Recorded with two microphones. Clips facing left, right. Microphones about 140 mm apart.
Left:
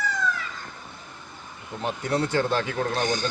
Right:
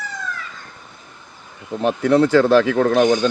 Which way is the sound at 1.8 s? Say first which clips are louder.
Right 11 dB; 90° right.